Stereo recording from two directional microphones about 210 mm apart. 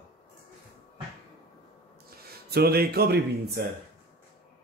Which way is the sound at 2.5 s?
50° right (ahead or behind).